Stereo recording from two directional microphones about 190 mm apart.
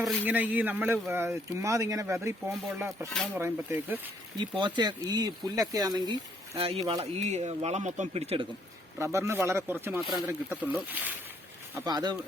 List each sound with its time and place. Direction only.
0.0 s speech: 10° right (ahead or behind)
4.4 s speech: 25° right (ahead or behind)
9.0 s speech: 15° right (ahead or behind)